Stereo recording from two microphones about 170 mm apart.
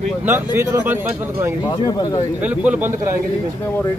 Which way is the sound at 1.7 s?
25° left (ahead or behind).